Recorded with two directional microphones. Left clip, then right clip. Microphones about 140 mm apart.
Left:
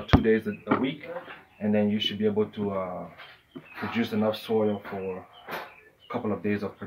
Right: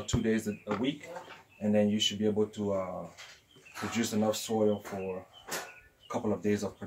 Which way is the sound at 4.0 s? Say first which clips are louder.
Left 3 dB; 20° right (ahead or behind).